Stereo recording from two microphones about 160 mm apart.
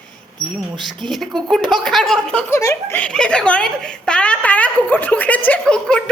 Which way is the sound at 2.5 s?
20° left (ahead or behind).